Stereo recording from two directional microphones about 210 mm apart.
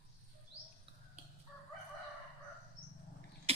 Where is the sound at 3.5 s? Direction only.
25° right (ahead or behind).